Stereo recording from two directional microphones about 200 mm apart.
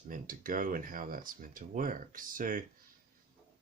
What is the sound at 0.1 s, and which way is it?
Speech, 45° right (ahead or behind).